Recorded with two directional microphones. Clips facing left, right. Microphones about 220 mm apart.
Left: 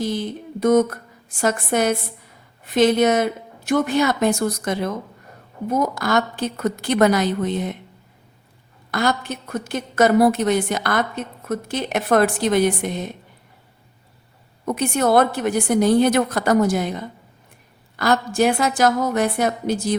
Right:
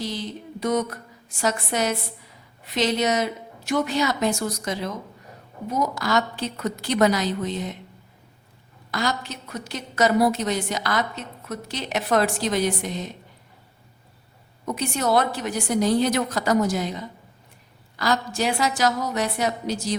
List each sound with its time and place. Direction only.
0.0 s a woman's voice: 50° left (ahead or behind)
8.9 s a woman's voice: 55° left (ahead or behind)
14.6 s a woman's voice: 55° left (ahead or behind)